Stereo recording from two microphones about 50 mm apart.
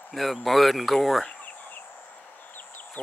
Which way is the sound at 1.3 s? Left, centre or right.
Left.